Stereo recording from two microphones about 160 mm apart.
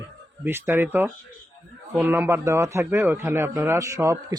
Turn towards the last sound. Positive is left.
turn(degrees=-20)  # may be behind; listen again after turning